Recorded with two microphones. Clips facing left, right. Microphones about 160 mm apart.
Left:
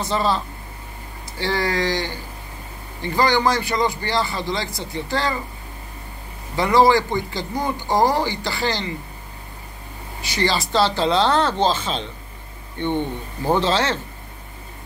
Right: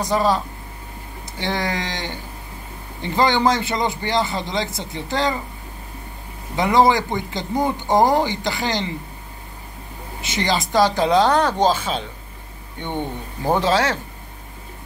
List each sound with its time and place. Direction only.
0.0 s speech: 15° right (ahead or behind)
1.4 s a man's voice: 20° right (ahead or behind)
6.5 s a man's voice: 20° right (ahead or behind)
10.2 s speech: 20° right (ahead or behind)
13.5 s speech: 10° right (ahead or behind)